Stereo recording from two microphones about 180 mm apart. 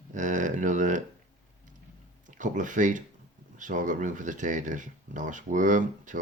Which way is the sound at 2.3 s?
45° right (ahead or behind).